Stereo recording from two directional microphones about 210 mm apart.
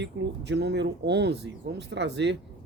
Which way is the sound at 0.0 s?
55° right (ahead or behind).